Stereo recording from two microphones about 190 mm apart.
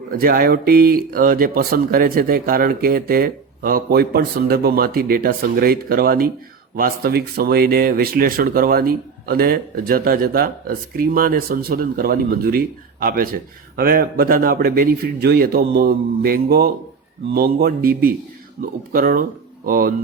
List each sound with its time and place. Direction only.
0.2 s speech: 50° right (ahead or behind)